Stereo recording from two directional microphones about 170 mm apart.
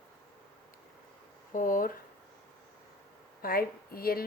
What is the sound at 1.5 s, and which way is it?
Speech, 55° left (ahead or behind).